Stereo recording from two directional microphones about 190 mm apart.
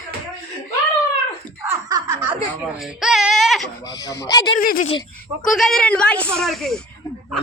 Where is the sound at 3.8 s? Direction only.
20° left (ahead or behind).